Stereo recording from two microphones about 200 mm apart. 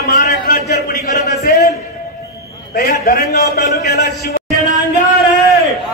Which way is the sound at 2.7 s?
50° left (ahead or behind).